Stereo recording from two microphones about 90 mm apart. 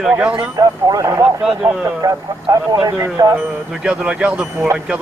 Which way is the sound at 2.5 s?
40° right (ahead or behind).